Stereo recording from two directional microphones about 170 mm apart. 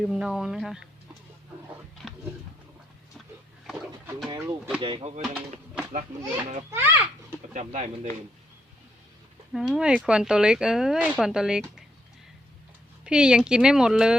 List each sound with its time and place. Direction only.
0.0 s speech: centre (ahead or behind)
4.3 s speech: 15° right (ahead or behind)
4.8 s speech: 30° right (ahead or behind)
6.7 s speech: 15° right (ahead or behind)
7.5 s speech: 40° right (ahead or behind)
9.5 s speech: centre (ahead or behind)
13.1 s speech: 5° right (ahead or behind)